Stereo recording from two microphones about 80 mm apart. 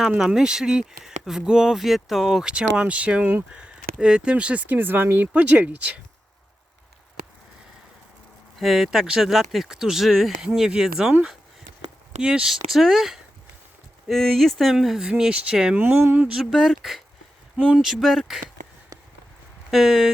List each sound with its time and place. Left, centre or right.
0.2 s speech: centre; by 5.3 s right
5.3 s speech: centre
8.5 s speech: centre
12.2 s speech: centre
16.2 s speech: centre
17.6 s speech: centre
17.8 s speech: centre
19.7 s speech: centre